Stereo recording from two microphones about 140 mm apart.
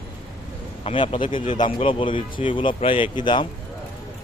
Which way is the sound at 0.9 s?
40° left (ahead or behind).